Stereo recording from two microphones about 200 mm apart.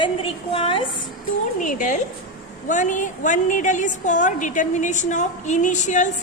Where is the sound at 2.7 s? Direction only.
40° left (ahead or behind).